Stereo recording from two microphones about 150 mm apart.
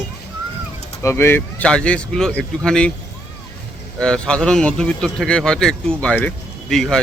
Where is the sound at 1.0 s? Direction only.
15° left (ahead or behind).